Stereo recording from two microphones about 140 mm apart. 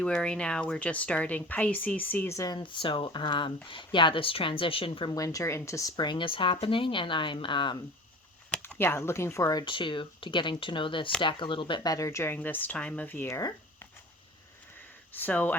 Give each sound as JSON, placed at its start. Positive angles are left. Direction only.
{"t": 0.0, "sound": "speech", "side_deg": 5}
{"t": 5.1, "sound": "speech", "side_deg": 25}
{"t": 8.8, "sound": "speech", "side_deg": 15}
{"t": 15.1, "sound": "speech", "side_deg": 15}